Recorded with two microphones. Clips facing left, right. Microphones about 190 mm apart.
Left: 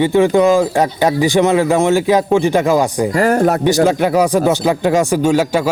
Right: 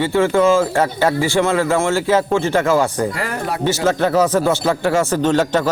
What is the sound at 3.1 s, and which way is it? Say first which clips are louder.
Speech: left 11 dB; 45° left (ahead or behind).